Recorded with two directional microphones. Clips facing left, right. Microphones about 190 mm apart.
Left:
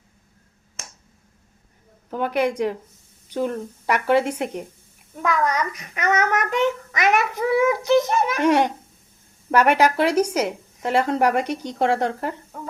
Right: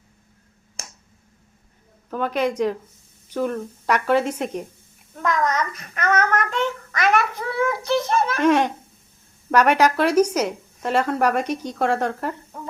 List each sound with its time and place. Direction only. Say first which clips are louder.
2.0 s a child's voice: left 1 dB; 15° left (ahead or behind)